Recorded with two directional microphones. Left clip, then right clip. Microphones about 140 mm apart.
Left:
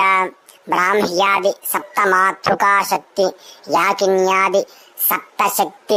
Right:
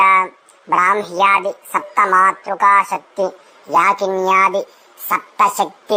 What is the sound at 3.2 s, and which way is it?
Speech, 30° left (ahead or behind).